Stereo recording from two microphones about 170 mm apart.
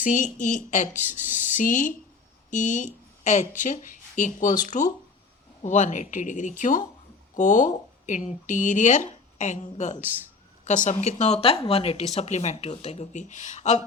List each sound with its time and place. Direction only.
0.0 s speech: 50° left (ahead or behind)